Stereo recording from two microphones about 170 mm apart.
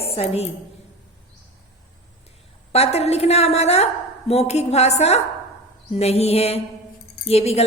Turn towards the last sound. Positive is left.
turn(degrees=35)  # may be behind; listen again after turning